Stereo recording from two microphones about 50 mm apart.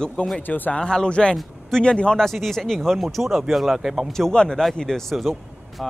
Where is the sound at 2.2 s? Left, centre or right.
Centre.